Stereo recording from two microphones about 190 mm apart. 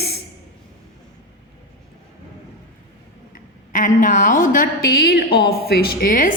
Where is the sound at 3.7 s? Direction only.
45° left (ahead or behind).